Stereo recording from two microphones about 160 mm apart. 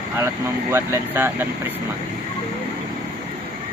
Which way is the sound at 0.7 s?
15° right (ahead or behind).